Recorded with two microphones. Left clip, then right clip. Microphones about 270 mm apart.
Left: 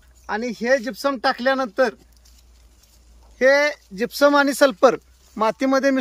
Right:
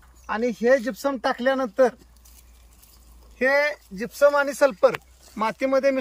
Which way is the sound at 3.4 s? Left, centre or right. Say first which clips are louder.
Left 5 dB; left.